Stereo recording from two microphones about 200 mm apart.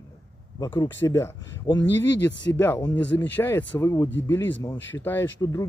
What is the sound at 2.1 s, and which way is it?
Speech, 60° left (ahead or behind).